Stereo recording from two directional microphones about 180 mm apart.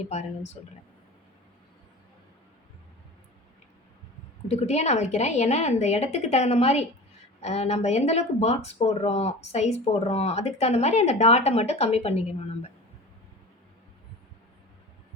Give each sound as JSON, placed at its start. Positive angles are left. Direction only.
{"t": 0.1, "sound": "speech", "side_deg": 40}
{"t": 4.4, "sound": "speech", "side_deg": 35}